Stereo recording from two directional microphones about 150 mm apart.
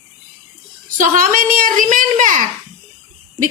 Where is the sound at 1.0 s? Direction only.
65° right (ahead or behind).